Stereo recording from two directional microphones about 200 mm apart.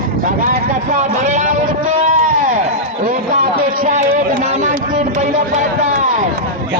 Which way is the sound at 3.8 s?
40° right (ahead or behind).